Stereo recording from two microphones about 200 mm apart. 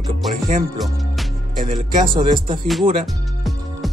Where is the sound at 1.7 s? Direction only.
30° right (ahead or behind).